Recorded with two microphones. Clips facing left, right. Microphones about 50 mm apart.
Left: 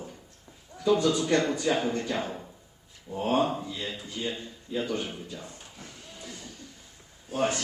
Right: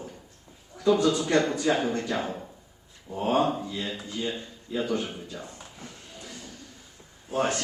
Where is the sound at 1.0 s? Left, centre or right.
Centre.